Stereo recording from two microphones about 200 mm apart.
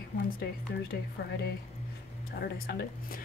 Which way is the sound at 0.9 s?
55° left (ahead or behind).